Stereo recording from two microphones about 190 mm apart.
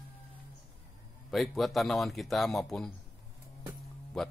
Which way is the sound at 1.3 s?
Centre (ahead or behind).